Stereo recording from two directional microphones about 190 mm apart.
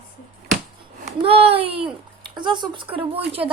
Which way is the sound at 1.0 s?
30° right (ahead or behind).